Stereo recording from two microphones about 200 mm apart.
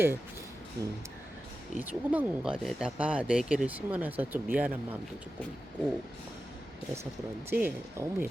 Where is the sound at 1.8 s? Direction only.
10° right (ahead or behind).